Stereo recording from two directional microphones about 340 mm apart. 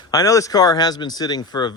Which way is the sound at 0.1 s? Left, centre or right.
Centre.